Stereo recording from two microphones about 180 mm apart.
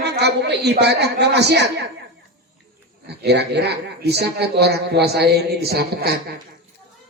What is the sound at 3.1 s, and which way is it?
A woman's voice, 65° right (ahead or behind).